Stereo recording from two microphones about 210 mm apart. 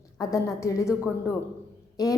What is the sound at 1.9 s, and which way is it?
Speech, 15° left (ahead or behind).